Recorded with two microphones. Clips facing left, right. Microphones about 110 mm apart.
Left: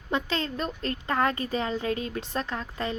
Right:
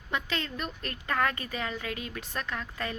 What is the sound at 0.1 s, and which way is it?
A woman's voice, 30° left (ahead or behind).